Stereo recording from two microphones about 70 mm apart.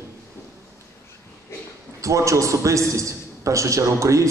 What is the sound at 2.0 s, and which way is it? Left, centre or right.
A man's voice, right.